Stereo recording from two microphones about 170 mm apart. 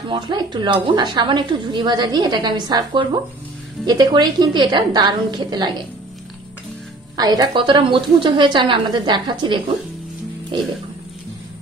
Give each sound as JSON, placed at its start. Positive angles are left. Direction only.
{"t": 0.1, "sound": "speech", "side_deg": -25}
{"t": 7.2, "sound": "speech", "side_deg": -25}